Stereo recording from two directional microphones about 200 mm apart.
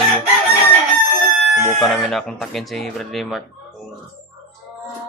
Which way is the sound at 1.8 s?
Centre (ahead or behind).